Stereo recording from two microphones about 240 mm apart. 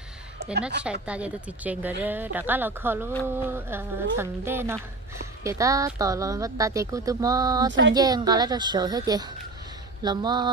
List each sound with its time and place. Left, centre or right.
0.6 s a woman's voice: right
1.0 s speech: centre